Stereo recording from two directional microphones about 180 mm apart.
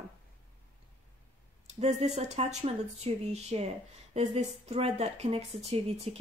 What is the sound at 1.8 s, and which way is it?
Speech, 35° right (ahead or behind).